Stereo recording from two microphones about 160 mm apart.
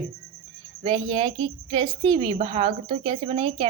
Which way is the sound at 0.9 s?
35° right (ahead or behind).